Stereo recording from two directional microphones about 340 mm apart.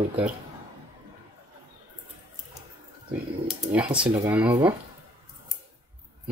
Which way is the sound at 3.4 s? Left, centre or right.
Centre.